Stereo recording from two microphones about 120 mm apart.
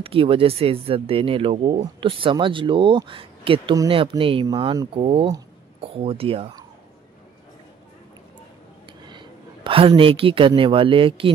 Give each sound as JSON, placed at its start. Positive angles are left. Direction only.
{"t": 0.0, "sound": "speech", "side_deg": -50}
{"t": 9.1, "sound": "a man's voice", "side_deg": -45}